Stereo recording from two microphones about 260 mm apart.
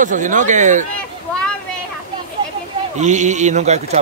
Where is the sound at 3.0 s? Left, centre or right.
Right.